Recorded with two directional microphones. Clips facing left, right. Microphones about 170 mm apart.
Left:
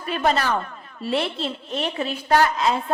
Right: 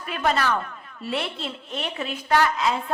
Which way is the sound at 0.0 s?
35° left (ahead or behind).